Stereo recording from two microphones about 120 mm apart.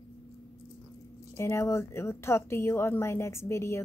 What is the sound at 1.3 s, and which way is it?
Speech, 20° left (ahead or behind).